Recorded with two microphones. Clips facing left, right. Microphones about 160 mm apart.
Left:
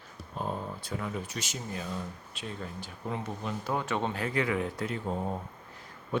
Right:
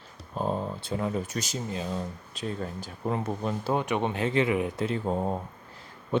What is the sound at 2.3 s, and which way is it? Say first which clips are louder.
Speech: right 7 dB; 40° right (ahead or behind).